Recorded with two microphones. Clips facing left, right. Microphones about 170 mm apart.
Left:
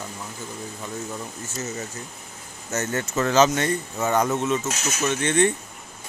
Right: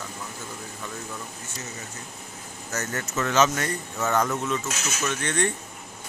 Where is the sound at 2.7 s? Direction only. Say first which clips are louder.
Left 5 dB; 25° left (ahead or behind).